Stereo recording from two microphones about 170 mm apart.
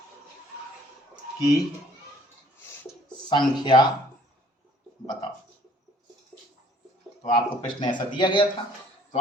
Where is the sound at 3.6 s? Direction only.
25° left (ahead or behind).